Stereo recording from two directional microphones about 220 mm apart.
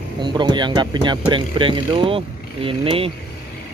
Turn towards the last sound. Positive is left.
turn(degrees=-25)  # may be behind; listen again after turning